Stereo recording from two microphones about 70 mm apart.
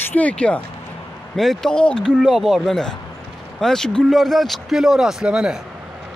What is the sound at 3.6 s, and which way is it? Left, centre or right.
Speech, centre.